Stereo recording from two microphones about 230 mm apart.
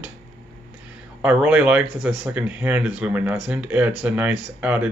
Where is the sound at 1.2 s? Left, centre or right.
Centre.